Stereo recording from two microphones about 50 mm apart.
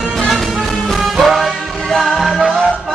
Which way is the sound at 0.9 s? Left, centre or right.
Centre.